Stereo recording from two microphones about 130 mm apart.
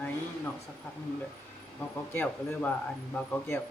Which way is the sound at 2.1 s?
15° left (ahead or behind).